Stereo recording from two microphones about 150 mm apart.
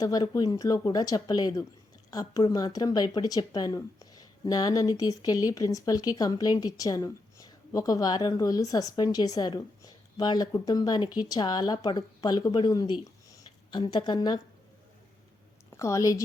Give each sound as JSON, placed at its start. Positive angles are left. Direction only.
{"t": 0.0, "sound": "speech", "side_deg": 25}
{"t": 15.8, "sound": "speech", "side_deg": 20}